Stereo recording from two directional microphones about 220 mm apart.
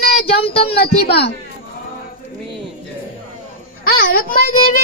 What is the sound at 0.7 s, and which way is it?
Speech, 50° left (ahead or behind).